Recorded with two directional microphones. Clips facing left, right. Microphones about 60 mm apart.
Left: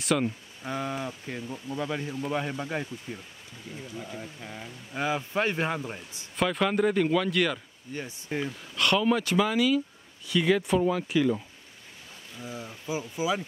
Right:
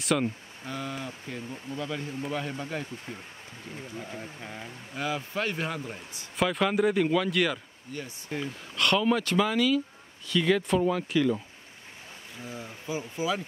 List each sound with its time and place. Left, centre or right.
0.0 s speech: centre
0.7 s speech: left
3.9 s speech: centre
4.9 s speech: left
6.3 s speech: centre
7.9 s speech: left
8.7 s speech: centre
12.8 s speech: centre